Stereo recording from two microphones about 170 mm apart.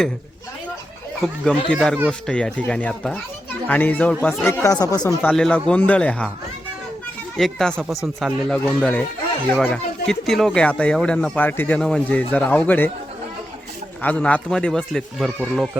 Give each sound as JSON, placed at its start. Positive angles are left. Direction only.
{"t": 1.7, "sound": "speech", "side_deg": 5}
{"t": 5.3, "sound": "speech", "side_deg": 5}
{"t": 7.3, "sound": "speech", "side_deg": 5}
{"t": 14.0, "sound": "speech", "side_deg": 10}